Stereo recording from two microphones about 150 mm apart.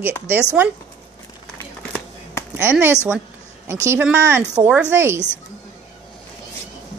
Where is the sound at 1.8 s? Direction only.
5° left (ahead or behind).